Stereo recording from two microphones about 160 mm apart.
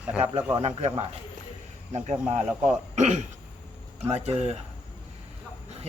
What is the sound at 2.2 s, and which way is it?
Speech, 5° right (ahead or behind).